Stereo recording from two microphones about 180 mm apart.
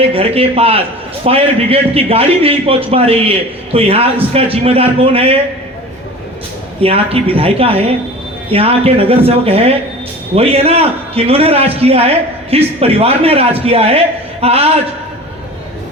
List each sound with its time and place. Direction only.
0.1 s a man's voice: 35° right (ahead or behind)
6.8 s a man's voice: 35° right (ahead or behind)